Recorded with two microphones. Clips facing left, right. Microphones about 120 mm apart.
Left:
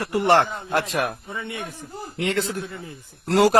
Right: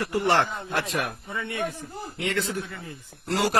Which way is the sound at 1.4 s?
20° left (ahead or behind).